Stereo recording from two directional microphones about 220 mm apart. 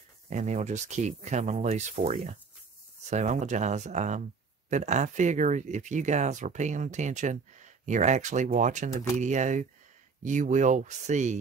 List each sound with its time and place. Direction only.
0.3 s speech: 30° right (ahead or behind)